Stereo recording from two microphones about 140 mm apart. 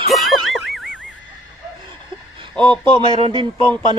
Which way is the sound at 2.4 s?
35° right (ahead or behind).